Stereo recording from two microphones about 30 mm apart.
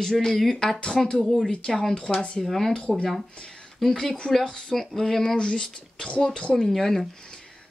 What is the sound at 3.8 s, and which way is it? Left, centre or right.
Speech, centre.